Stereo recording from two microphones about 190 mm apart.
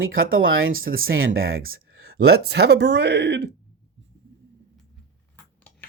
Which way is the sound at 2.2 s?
55° right (ahead or behind).